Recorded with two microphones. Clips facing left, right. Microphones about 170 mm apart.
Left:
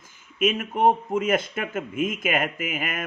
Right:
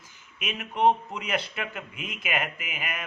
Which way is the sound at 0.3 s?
50° left (ahead or behind).